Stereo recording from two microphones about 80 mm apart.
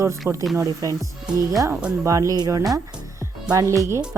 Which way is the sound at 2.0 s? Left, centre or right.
Right.